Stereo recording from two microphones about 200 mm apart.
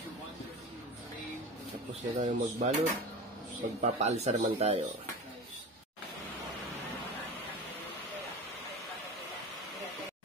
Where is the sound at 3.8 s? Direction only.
35° right (ahead or behind).